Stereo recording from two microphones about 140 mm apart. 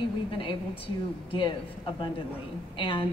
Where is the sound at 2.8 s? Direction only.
35° left (ahead or behind).